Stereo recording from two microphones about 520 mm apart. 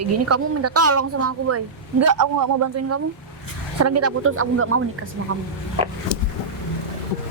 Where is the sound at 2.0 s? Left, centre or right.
Right.